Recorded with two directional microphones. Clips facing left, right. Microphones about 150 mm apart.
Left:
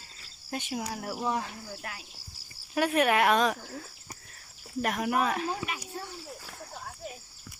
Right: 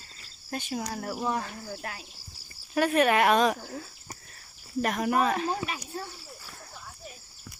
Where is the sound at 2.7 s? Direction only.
10° left (ahead or behind).